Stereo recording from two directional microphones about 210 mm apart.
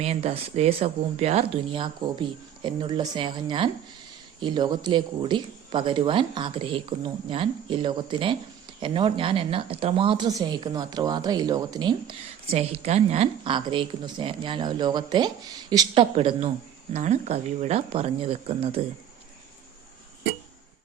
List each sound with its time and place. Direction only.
0.0 s a woman's voice: 30° right (ahead or behind)